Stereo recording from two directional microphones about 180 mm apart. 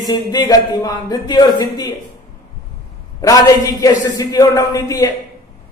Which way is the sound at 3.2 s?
20° left (ahead or behind).